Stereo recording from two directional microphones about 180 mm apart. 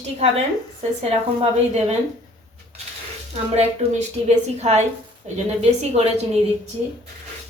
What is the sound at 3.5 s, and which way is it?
A woman's voice, 35° right (ahead or behind).